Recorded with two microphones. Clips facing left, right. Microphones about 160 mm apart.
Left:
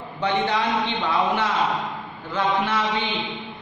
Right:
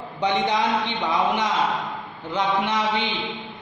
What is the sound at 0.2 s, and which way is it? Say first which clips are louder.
A man's voice: right 1 dB; 15° right (ahead or behind).